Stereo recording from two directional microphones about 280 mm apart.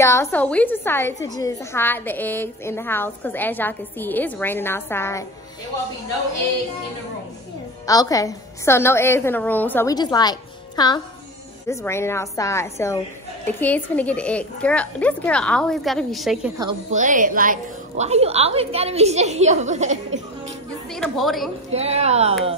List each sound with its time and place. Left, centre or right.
0.0 s a woman's voice: centre
7.8 s a woman's voice: centre
16.9 s a woman's voice: right
20.9 s speech: centre
21.7 s a woman's voice: right